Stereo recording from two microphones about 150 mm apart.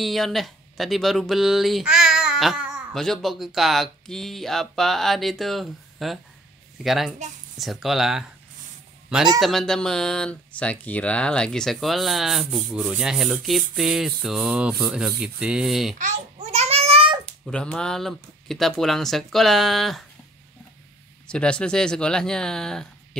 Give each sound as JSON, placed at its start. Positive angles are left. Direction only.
{"t": 0.0, "sound": "speech", "side_deg": 0}
{"t": 9.4, "sound": "speech", "side_deg": 0}
{"t": 16.0, "sound": "child singing", "side_deg": -45}
{"t": 17.5, "sound": "speech", "side_deg": 5}
{"t": 21.3, "sound": "speech", "side_deg": 5}